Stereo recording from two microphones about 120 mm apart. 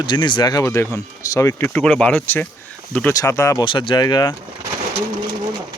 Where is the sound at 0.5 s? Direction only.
25° left (ahead or behind).